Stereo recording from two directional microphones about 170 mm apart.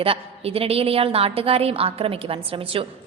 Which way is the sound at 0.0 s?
35° right (ahead or behind).